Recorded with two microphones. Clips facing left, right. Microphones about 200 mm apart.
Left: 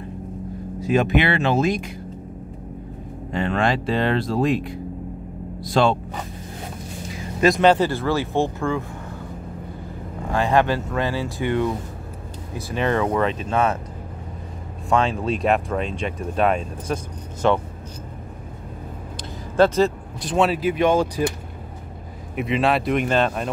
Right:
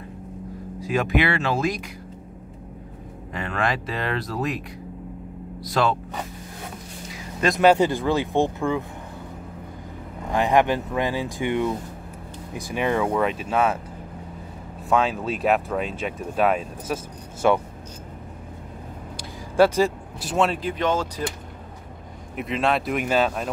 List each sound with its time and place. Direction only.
0.7 s speech: 25° left (ahead or behind)
3.3 s speech: 30° left (ahead or behind)
7.3 s speech: centre (ahead or behind)
7.6 s speech: 15° right (ahead or behind)
10.3 s speech: 15° right (ahead or behind)
14.9 s speech: 5° right (ahead or behind)
19.5 s speech: 10° right (ahead or behind); by 21.1 s 15° left (ahead or behind)
22.3 s speech: centre (ahead or behind)